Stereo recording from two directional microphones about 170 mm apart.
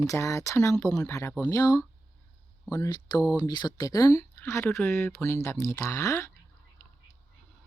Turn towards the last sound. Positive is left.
turn(degrees=15)  # may be behind; listen again after turning